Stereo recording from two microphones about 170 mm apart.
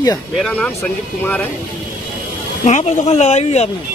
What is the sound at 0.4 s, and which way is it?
Speech, 10° left (ahead or behind).